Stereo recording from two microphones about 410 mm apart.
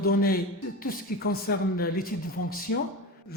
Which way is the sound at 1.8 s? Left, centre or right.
Left.